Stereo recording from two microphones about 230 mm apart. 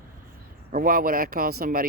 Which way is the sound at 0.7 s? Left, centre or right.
Right.